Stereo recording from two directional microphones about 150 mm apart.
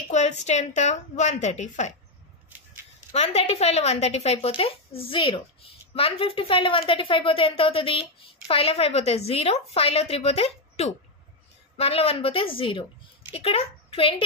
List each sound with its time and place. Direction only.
0.1 s a woman's voice: 50° left (ahead or behind)
3.1 s a woman's voice: 45° left (ahead or behind)